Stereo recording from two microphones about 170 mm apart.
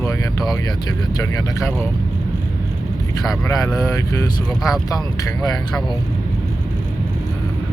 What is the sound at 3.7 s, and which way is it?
Speech, 20° left (ahead or behind).